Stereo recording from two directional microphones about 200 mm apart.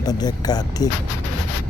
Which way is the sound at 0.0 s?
20° left (ahead or behind).